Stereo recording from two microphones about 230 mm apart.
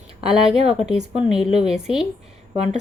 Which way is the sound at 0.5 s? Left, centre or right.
Right.